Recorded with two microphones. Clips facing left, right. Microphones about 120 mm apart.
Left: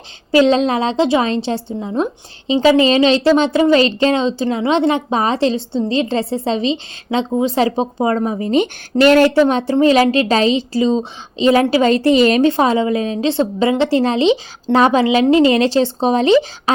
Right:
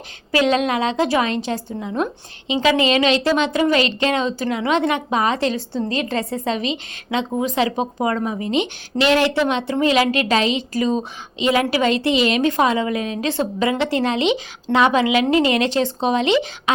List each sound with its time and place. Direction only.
0.3 s a woman's voice: 30° left (ahead or behind)
12.5 s a woman's voice: 30° left (ahead or behind)